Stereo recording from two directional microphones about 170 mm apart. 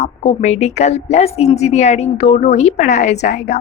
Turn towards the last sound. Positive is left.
turn(degrees=45)  # may be behind; listen again after turning